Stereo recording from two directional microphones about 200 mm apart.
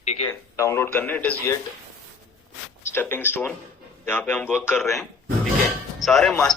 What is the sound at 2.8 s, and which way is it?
A man's voice, 10° left (ahead or behind).